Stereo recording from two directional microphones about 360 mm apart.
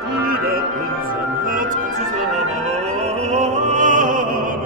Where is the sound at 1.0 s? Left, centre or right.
Right.